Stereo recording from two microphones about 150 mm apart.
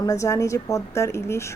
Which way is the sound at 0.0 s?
20° left (ahead or behind).